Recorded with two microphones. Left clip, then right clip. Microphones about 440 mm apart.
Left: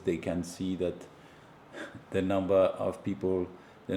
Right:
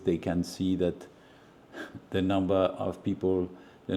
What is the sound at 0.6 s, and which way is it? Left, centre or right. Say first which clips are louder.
Speech: right 8 dB; right.